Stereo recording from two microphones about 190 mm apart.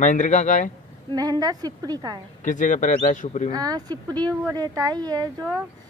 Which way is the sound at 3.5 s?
20° right (ahead or behind).